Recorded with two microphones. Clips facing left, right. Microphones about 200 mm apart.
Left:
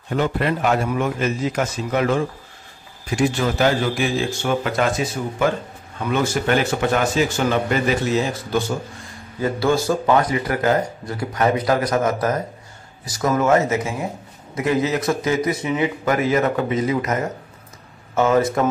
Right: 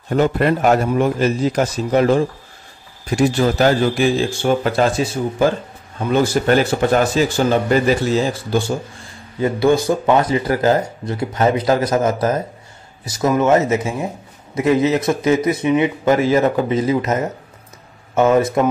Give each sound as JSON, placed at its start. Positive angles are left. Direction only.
{"t": 0.1, "sound": "a man's voice", "side_deg": -45}
{"t": 9.4, "sound": "speech", "side_deg": -20}